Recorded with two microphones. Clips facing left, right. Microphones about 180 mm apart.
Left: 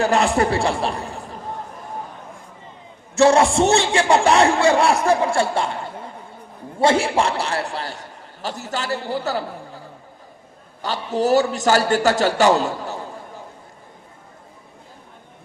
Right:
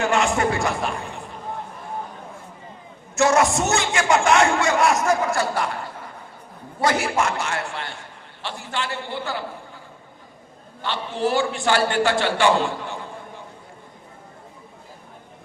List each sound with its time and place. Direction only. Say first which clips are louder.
0.0 s a man's voice: left 3 dB; 35° left (ahead or behind)
3.2 s a man's voice: left 4 dB; 30° left (ahead or behind)
10.8 s a man's voice: left 4 dB; 40° left (ahead or behind)